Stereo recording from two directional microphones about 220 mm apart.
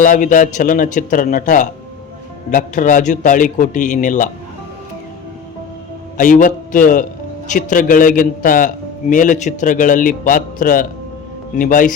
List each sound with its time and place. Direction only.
0.0 s a man's voice: 35° left (ahead or behind)
6.1 s a man's voice: 40° left (ahead or behind)